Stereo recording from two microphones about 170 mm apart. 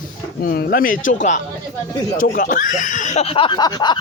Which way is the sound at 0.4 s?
60° left (ahead or behind).